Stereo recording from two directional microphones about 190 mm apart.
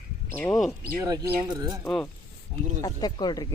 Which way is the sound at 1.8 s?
Centre (ahead or behind).